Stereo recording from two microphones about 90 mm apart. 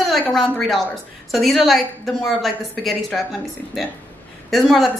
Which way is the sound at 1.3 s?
Centre (ahead or behind).